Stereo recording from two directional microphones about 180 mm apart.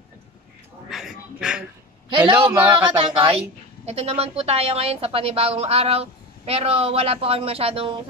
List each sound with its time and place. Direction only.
0.8 s a sound: centre (ahead or behind)
2.0 s a man's voice: 30° right (ahead or behind)
2.4 s speech: 10° right (ahead or behind)
3.0 s a woman's voice: 30° right (ahead or behind)